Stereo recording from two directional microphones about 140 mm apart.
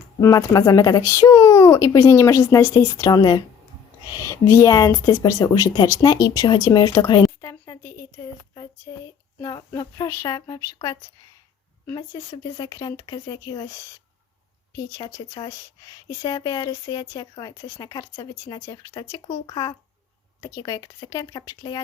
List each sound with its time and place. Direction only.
0.2 s speech: 25° left (ahead or behind)
8.9 s a sound: 30° left (ahead or behind)
9.4 s speech: 25° left (ahead or behind)